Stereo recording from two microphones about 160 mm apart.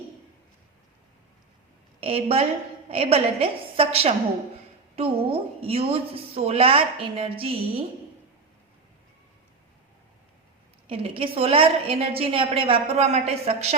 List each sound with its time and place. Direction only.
2.0 s a woman's voice: 35° right (ahead or behind)
10.8 s a woman's voice: 35° right (ahead or behind)